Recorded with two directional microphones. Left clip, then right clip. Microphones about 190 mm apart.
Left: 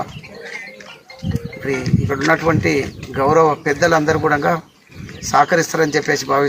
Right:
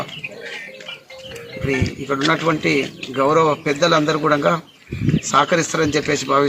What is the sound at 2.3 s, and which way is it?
Speech, 15° left (ahead or behind).